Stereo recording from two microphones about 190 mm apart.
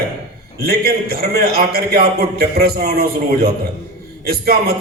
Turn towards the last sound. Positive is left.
turn(degrees=-55)  # may be behind; listen again after turning